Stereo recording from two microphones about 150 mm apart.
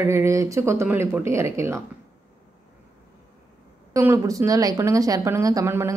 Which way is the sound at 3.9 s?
20° right (ahead or behind).